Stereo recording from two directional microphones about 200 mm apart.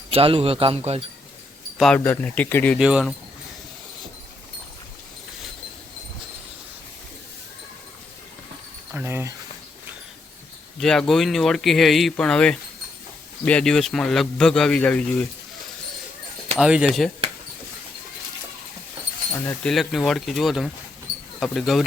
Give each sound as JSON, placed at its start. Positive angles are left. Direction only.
{"t": 0.1, "sound": "speech", "side_deg": -30}
{"t": 1.8, "sound": "speech", "side_deg": 5}
{"t": 2.7, "sound": "a man's voice", "side_deg": -5}
{"t": 8.9, "sound": "a sound", "side_deg": -10}
{"t": 10.8, "sound": "a man's voice", "side_deg": 5}
{"t": 16.6, "sound": "a man's voice", "side_deg": -5}
{"t": 19.5, "sound": "a man's voice", "side_deg": 0}